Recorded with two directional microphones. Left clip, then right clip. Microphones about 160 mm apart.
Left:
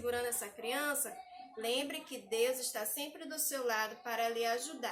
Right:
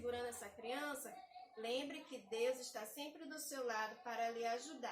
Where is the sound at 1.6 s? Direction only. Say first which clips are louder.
Left 7 dB; 25° left (ahead or behind).